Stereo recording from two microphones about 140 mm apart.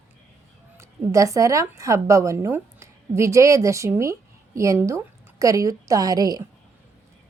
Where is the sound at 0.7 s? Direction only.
20° right (ahead or behind).